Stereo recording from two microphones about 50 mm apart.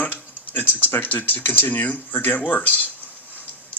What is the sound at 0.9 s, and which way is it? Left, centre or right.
Speech, left.